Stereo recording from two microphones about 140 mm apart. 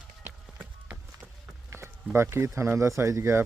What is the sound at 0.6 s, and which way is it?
Run, 10° right (ahead or behind).